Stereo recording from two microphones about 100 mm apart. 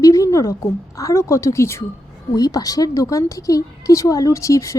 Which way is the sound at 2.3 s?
40° left (ahead or behind).